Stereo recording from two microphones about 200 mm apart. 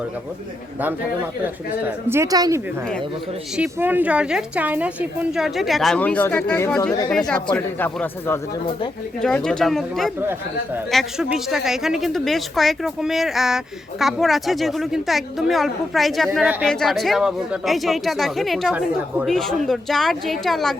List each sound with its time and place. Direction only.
2.0 s speech: 15° right (ahead or behind)
3.5 s a woman's voice: 10° right (ahead or behind)